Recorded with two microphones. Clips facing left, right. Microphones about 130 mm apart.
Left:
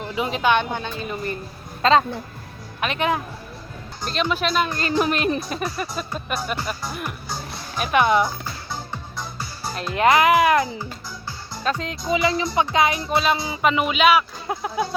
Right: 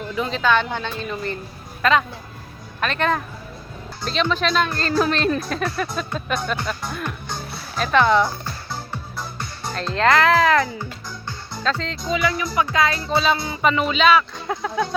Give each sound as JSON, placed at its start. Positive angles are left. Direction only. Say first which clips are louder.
{"t": 0.2, "sound": "speech", "louder": "even", "side_deg": 15}
{"t": 1.8, "sound": "speech", "louder": "left 2 dB", "side_deg": 30}
{"t": 2.8, "sound": "speech", "louder": "right 1 dB", "side_deg": 15}
{"t": 7.8, "sound": "speech", "louder": "right 1 dB", "side_deg": 15}
{"t": 9.1, "sound": "music", "louder": "right 1 dB", "side_deg": 0}
{"t": 11.3, "sound": "speech", "louder": "right 1 dB", "side_deg": 15}
{"t": 12.7, "sound": "music", "louder": "left 1 dB", "side_deg": 20}
{"t": 13.0, "sound": "speech", "louder": "right 1 dB", "side_deg": 0}